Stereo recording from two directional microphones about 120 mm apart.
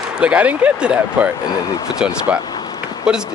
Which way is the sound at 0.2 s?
10° right (ahead or behind).